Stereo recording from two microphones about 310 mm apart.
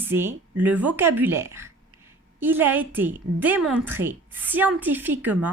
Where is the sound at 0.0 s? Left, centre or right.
Centre.